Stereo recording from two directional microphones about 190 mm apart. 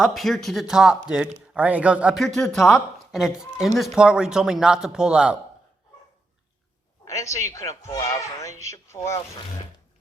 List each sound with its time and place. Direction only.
0.0 s speech: centre (ahead or behind)
7.0 s a man's voice: 15° left (ahead or behind)